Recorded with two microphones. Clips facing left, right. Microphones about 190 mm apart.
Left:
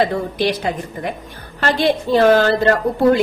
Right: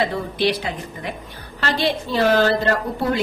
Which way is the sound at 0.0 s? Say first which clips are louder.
Left 3 dB; 45° left (ahead or behind).